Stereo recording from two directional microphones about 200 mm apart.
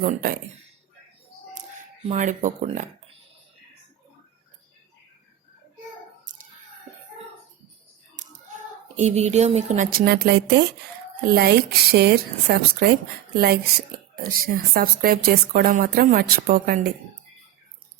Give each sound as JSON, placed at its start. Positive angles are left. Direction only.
{"t": 0.0, "sound": "speech", "side_deg": -45}
{"t": 2.0, "sound": "speech", "side_deg": -35}
{"t": 8.1, "sound": "a sound", "side_deg": -40}
{"t": 9.0, "sound": "speech", "side_deg": -35}